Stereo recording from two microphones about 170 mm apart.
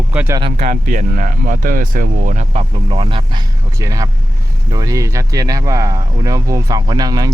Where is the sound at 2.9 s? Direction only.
30° right (ahead or behind).